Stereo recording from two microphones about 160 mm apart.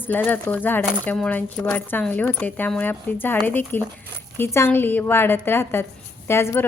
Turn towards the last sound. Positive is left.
turn(degrees=15)  # may be behind; listen again after turning